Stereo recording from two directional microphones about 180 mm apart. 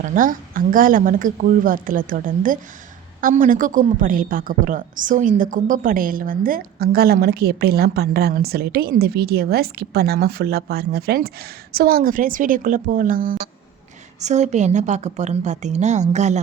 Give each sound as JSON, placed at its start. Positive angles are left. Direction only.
{"t": 0.0, "sound": "a woman's voice", "side_deg": -50}